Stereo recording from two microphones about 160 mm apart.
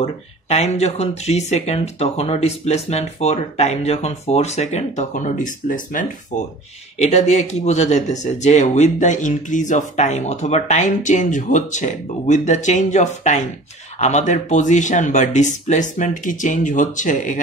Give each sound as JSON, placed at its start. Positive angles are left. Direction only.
{"t": 0.0, "sound": "speech", "side_deg": 40}
{"t": 7.0, "sound": "speech", "side_deg": 45}